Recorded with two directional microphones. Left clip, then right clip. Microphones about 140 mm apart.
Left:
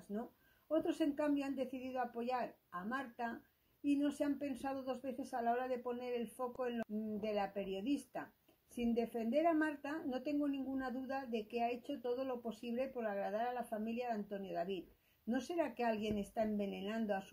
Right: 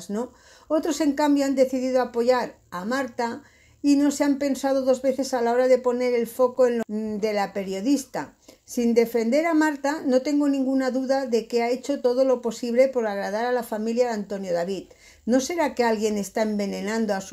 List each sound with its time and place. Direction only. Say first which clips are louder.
0.7 s a woman's voice: right 14 dB; 25° right (ahead or behind)